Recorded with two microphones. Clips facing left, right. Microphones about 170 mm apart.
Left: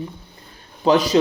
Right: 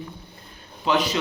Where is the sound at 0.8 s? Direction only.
40° left (ahead or behind).